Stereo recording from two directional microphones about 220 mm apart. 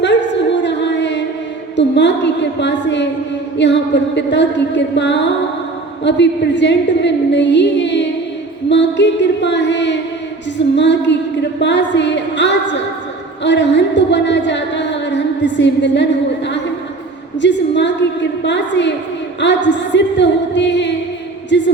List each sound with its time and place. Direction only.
0.6 s music: 55° left (ahead or behind)
1.7 s a woman's voice: 55° left (ahead or behind)
17.4 s a woman's voice: 55° left (ahead or behind)